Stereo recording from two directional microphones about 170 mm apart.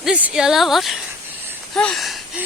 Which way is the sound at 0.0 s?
5° right (ahead or behind).